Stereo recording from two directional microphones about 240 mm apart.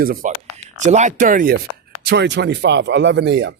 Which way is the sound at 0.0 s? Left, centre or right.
Right.